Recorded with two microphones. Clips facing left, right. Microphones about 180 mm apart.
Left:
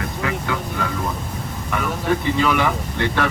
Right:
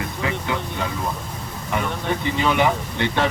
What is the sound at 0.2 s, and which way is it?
Vehicle, 25° right (ahead or behind).